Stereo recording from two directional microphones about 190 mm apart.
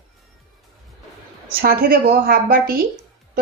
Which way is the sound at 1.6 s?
50° right (ahead or behind).